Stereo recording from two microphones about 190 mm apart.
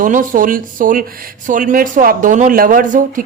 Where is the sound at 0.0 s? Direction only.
45° right (ahead or behind).